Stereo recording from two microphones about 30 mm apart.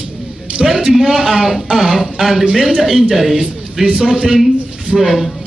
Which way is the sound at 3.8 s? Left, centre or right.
Right.